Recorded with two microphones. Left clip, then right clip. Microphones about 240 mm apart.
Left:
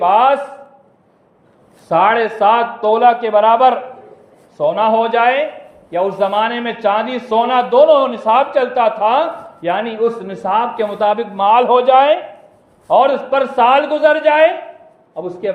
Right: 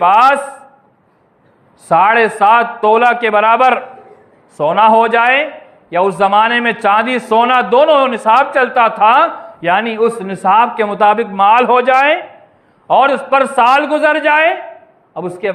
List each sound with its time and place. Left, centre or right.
0.0 s a man's voice: right
1.9 s a man's voice: right